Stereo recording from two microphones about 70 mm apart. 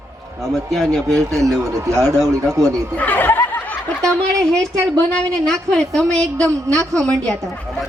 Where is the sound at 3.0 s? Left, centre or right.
Left.